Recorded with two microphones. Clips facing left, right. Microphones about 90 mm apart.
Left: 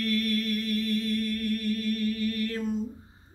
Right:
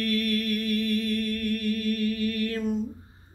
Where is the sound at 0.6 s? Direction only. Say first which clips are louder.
Right 2 dB; 30° left (ahead or behind).